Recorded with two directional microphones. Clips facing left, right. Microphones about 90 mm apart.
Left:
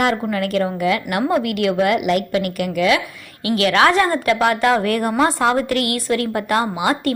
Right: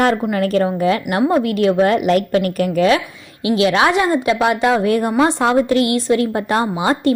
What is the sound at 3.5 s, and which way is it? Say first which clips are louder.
A woman's voice: right 1 dB; 20° right (ahead or behind).